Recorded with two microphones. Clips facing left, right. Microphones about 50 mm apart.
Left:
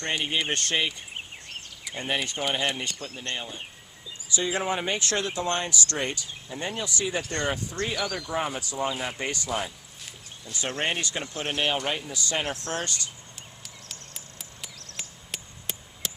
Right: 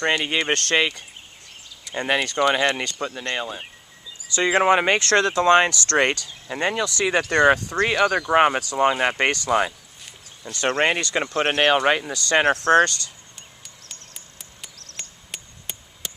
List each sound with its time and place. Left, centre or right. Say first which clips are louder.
0.0 s speech: right 6 dB; right
4.4 s speech: right 10 dB; right
13.6 s cricket: even; centre
14.9 s chop: right 1 dB; centre